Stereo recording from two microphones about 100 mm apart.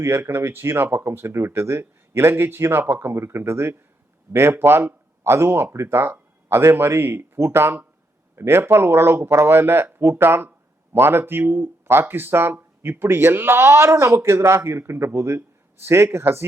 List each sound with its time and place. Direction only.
0.0 s speech: 25° right (ahead or behind)